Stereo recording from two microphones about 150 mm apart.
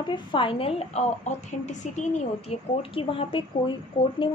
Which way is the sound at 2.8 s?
35° left (ahead or behind).